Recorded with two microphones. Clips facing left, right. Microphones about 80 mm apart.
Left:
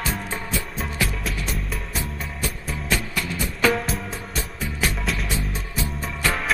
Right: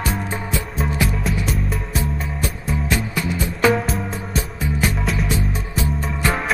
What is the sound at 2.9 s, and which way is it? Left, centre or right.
Music, centre.